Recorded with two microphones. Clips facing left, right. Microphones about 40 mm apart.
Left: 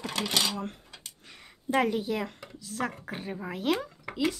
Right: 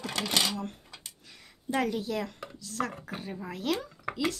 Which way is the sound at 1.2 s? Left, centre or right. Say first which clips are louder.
Left 3 dB; left.